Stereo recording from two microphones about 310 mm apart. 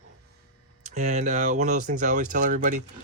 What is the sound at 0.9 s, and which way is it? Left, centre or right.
Speech, right.